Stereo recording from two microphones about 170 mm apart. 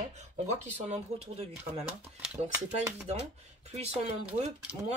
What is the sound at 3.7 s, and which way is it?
Speech, 40° right (ahead or behind).